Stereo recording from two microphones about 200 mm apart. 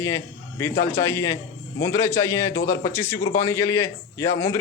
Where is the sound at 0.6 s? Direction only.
15° left (ahead or behind).